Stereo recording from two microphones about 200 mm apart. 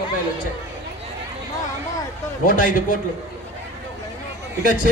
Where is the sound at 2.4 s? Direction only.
45° left (ahead or behind).